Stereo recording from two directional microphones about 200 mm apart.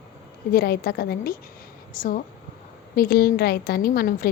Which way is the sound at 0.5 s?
50° left (ahead or behind).